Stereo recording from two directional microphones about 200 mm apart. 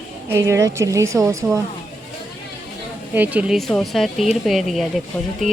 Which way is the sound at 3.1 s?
10° right (ahead or behind).